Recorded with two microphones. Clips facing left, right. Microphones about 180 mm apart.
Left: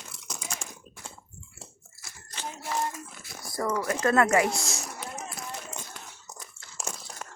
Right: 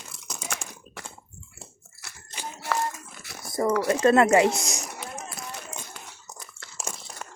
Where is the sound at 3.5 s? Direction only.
20° right (ahead or behind).